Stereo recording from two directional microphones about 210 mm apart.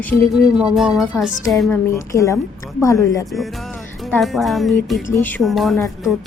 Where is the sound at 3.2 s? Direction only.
Centre (ahead or behind).